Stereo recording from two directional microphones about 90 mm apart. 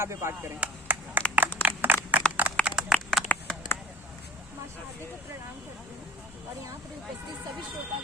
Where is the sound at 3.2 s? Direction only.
15° left (ahead or behind).